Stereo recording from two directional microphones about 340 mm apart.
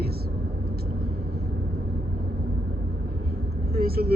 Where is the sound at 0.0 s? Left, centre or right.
Right.